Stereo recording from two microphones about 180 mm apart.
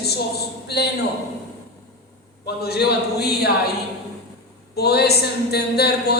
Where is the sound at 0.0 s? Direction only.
65° left (ahead or behind).